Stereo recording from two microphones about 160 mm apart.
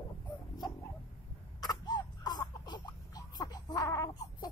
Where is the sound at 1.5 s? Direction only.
25° left (ahead or behind).